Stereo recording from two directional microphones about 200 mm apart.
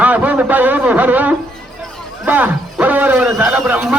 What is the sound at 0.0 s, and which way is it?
A man's voice, 5° right (ahead or behind).